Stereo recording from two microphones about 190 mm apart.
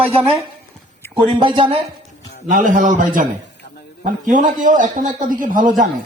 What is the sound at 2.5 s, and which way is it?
Speech, 45° right (ahead or behind).